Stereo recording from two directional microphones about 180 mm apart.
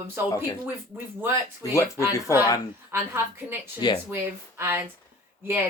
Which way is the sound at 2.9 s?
15° right (ahead or behind).